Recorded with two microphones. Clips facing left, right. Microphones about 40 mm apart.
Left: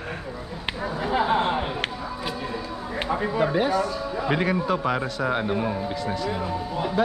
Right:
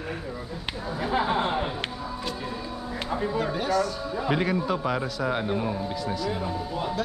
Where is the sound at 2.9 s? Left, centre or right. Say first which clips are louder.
Left 3 dB; left.